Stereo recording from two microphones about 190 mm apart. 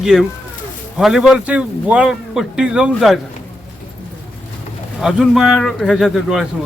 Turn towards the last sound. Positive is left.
turn(degrees=0)  # may be behind; listen again after turning